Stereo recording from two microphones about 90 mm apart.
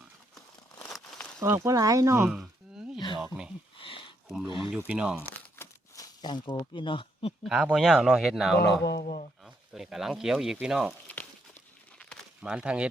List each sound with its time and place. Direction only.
1.4 s speech: 35° right (ahead or behind)
2.2 s a sound: 5° right (ahead or behind)
3.8 s speech: 75° left (ahead or behind)
4.4 s speech: 65° left (ahead or behind)
4.9 s speech: 10° right (ahead or behind)
6.0 s crumpling: 55° left (ahead or behind)
6.7 s speech: 65° left (ahead or behind)
7.4 s a man's voice: 5° right (ahead or behind)
12.4 s speech: 10° right (ahead or behind)